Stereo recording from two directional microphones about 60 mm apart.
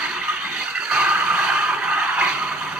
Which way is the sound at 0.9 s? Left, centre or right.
Centre.